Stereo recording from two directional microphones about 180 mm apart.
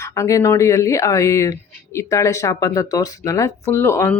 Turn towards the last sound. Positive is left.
turn(degrees=15)  # may be behind; listen again after turning